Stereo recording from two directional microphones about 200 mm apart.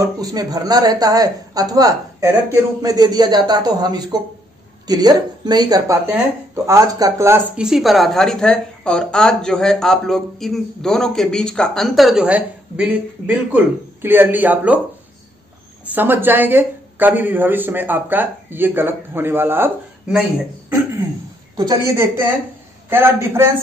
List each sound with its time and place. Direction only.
0.0 s a woman's voice: 20° right (ahead or behind)
14.0 s speech: 10° right (ahead or behind)
15.9 s speech: 10° right (ahead or behind)
21.5 s speech: 15° right (ahead or behind)